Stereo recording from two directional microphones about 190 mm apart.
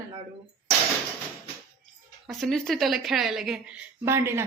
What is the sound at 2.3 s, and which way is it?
A woman's voice, centre (ahead or behind).